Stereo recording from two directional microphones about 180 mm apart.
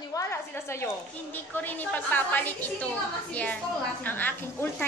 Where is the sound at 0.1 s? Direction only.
15° left (ahead or behind).